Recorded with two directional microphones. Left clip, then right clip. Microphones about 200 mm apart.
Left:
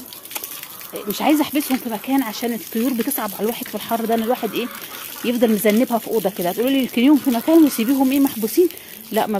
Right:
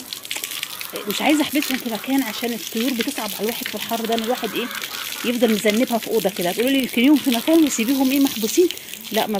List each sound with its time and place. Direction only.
1.1 s speech: 5° left (ahead or behind)